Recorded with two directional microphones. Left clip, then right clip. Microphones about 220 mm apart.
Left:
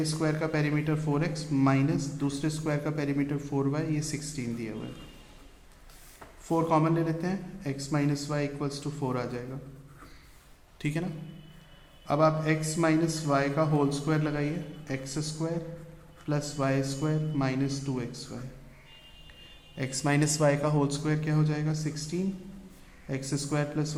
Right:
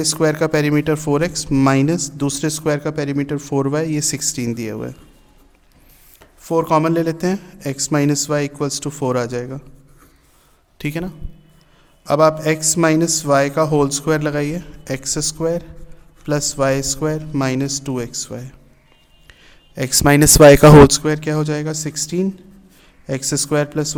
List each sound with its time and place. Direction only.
0.0 s speech: 55° right (ahead or behind)
6.4 s a man's voice: 50° right (ahead or behind)
10.8 s a man's voice: 45° right (ahead or behind)